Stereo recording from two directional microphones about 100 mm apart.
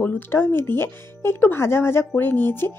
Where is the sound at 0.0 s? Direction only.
20° left (ahead or behind).